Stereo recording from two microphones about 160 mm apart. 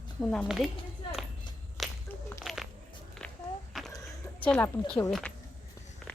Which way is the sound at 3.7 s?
Centre (ahead or behind).